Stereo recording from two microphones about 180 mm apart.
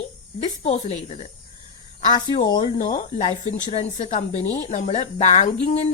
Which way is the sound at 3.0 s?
40° left (ahead or behind).